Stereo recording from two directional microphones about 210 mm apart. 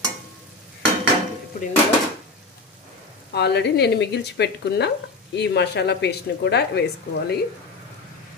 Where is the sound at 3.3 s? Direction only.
50° left (ahead or behind).